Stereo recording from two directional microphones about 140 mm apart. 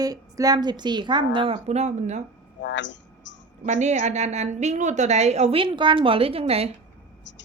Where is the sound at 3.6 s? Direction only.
55° right (ahead or behind).